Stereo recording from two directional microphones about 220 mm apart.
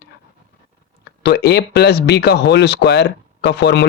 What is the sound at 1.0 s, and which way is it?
Speech, 50° left (ahead or behind).